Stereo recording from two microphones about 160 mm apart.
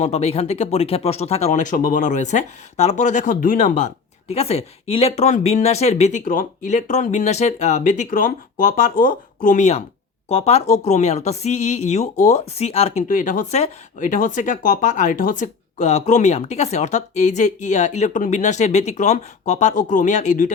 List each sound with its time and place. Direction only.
0.0 s speech: 40° left (ahead or behind)
13.1 s speech: 55° left (ahead or behind)